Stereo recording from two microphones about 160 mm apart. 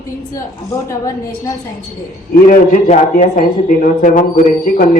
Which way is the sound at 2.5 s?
50° left (ahead or behind).